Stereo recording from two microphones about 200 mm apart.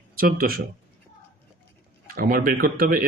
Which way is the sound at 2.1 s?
45° right (ahead or behind).